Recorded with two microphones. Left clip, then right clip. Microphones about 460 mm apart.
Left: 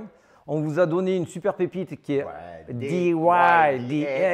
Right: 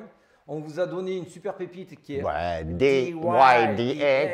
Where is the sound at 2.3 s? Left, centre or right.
Right.